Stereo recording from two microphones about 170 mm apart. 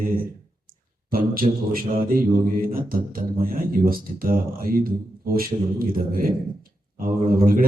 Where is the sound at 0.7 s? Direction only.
55° right (ahead or behind).